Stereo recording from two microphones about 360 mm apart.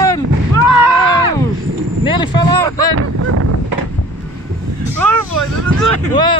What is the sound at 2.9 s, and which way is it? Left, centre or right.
Speech, right.